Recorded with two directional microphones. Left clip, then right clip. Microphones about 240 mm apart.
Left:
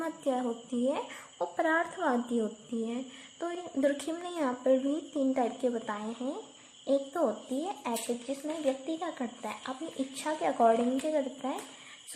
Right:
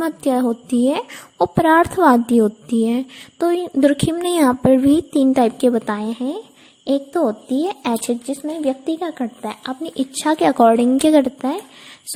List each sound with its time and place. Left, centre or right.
0.0 s a woman's voice: right